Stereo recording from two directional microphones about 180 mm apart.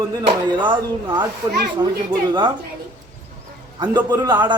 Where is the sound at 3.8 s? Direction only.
20° right (ahead or behind).